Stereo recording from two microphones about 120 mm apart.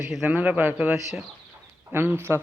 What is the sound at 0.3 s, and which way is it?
Speech, 15° right (ahead or behind).